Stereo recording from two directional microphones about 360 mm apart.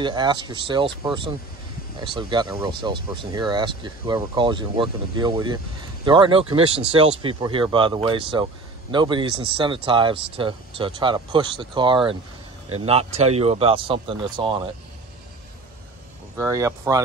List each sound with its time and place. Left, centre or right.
0.0 s speech: centre
16.3 s speech: centre